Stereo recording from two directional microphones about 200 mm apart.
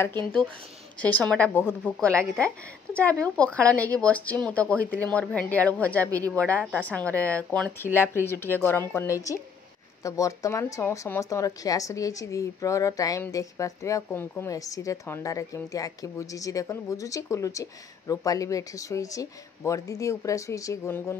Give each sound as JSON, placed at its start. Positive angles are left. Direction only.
{"t": 0.9, "sound": "speech", "side_deg": 5}